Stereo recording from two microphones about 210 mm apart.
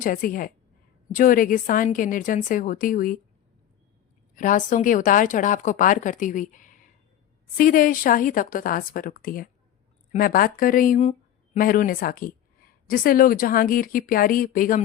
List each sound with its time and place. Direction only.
0.0 s speech: 40° left (ahead or behind)
4.4 s speech: 40° left (ahead or behind)